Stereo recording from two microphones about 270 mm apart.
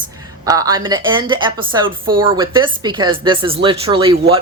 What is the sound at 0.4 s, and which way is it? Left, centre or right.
A woman's voice, centre.